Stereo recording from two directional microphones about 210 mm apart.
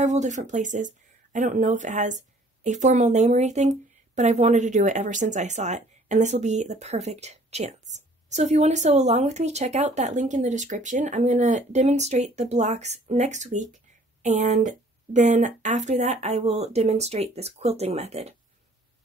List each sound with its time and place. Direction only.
0.0 s speech: 35° right (ahead or behind)